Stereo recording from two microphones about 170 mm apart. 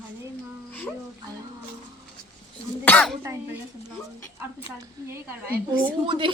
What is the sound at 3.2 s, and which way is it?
Speech, 15° right (ahead or behind).